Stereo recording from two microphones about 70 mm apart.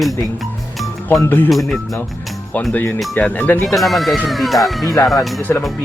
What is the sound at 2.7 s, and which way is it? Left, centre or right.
Speech, left.